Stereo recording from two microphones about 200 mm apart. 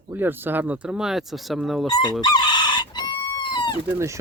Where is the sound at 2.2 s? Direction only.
20° left (ahead or behind).